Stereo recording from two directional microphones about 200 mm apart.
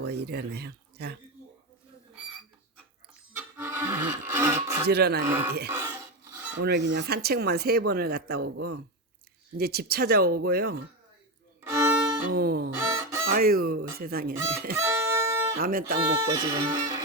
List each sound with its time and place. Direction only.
0.0 s speech: 55° right (ahead or behind)
3.3 s a sound: 10° right (ahead or behind)
4.9 s speech: 55° right (ahead or behind)
5.2 s speech: 10° right (ahead or behind)
5.6 s a sound: 10° right (ahead or behind)
6.6 s speech: 55° right (ahead or behind)
12.3 s speech: 50° right (ahead or behind)
12.7 s goose: 15° right (ahead or behind)
13.2 s fowl: 45° right (ahead or behind)
14.0 s speech: 50° right (ahead or behind)
14.8 s music: 15° right (ahead or behind)
15.5 s speech: 50° right (ahead or behind)
16.0 s speech: 20° right (ahead or behind)